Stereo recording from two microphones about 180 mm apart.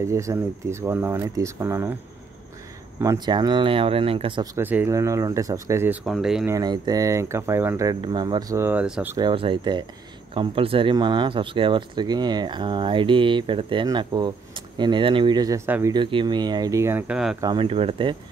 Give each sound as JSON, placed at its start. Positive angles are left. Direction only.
{"t": 0.0, "sound": "speech", "side_deg": -15}
{"t": 3.0, "sound": "speech", "side_deg": -20}
{"t": 4.6, "sound": "speech", "side_deg": -10}
{"t": 6.0, "sound": "speech", "side_deg": 0}
{"t": 6.4, "sound": "speech", "side_deg": -20}
{"t": 9.1, "sound": "speech", "side_deg": -25}
{"t": 16.0, "sound": "speech", "side_deg": -25}
{"t": 17.4, "sound": "speech", "side_deg": -25}